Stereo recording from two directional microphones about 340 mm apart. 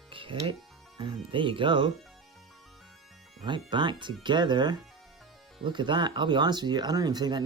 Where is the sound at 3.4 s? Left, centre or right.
Centre.